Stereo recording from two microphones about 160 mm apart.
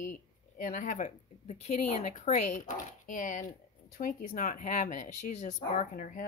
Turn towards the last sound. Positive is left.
turn(degrees=55)  # may be behind; listen again after turning